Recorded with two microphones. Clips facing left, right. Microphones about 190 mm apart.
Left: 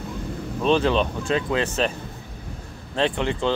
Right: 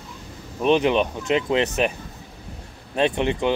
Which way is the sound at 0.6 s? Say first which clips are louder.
Right 1 dB; 15° right (ahead or behind).